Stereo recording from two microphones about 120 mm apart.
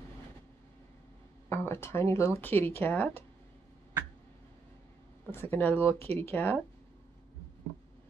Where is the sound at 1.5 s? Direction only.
20° left (ahead or behind).